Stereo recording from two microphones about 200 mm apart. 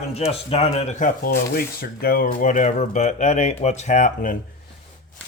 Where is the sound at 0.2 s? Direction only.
30° left (ahead or behind).